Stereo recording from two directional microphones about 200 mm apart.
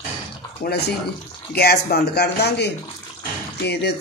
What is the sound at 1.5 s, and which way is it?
Speech, 55° left (ahead or behind).